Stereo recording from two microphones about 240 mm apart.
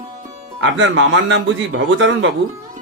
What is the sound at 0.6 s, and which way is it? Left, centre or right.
A man's voice, right.